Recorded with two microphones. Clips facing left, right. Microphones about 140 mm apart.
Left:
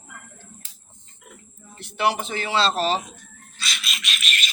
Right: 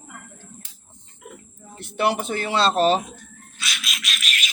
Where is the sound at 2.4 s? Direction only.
50° right (ahead or behind).